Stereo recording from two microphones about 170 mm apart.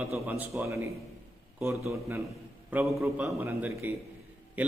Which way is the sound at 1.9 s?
15° right (ahead or behind).